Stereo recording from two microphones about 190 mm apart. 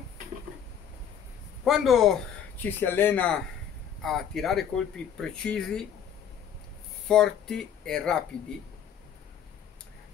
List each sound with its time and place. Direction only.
1.6 s a man's voice: centre (ahead or behind)
7.1 s speech: 5° left (ahead or behind)